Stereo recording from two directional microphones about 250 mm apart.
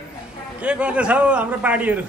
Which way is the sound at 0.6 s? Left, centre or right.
Centre.